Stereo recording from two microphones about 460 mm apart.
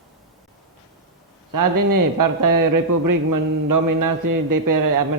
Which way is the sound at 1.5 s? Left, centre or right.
Right.